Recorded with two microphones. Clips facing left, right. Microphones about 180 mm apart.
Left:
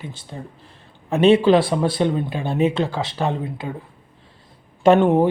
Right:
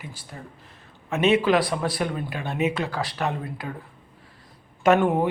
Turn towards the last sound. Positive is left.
turn(degrees=30)  # may be behind; listen again after turning